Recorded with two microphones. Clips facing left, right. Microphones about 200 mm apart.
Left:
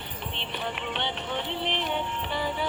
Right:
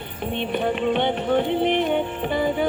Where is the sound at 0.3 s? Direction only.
50° right (ahead or behind).